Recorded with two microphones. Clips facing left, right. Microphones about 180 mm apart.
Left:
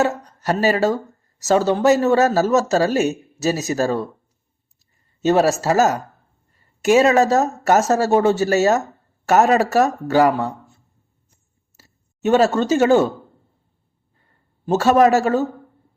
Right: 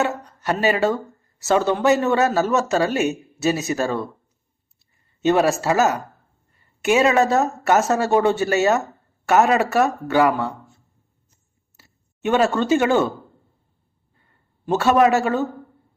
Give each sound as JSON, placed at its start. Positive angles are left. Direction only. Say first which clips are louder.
{"t": 0.0, "sound": "speech", "louder": "left 3 dB", "side_deg": 40}
{"t": 5.2, "sound": "speech", "louder": "left 1 dB", "side_deg": 40}
{"t": 11.8, "sound": "speech", "louder": "left 4 dB", "side_deg": 40}
{"t": 14.6, "sound": "speech", "louder": "left 2 dB", "side_deg": 40}